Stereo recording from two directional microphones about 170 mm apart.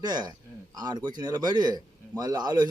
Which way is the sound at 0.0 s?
25° right (ahead or behind).